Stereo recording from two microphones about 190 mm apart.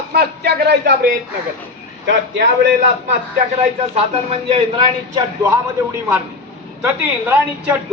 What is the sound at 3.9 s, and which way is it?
Speech, 35° right (ahead or behind).